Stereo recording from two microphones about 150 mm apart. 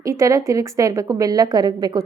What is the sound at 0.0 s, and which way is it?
A woman's voice, 20° right (ahead or behind).